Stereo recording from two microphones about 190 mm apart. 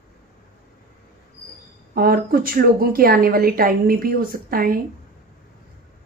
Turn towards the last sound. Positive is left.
turn(degrees=-50)  # may be behind; listen again after turning